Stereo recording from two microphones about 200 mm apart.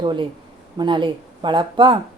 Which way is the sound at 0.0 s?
25° right (ahead or behind).